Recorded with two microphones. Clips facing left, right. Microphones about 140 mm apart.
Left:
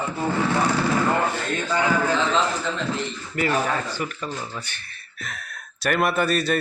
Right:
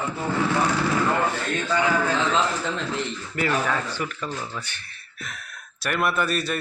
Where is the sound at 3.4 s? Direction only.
35° left (ahead or behind).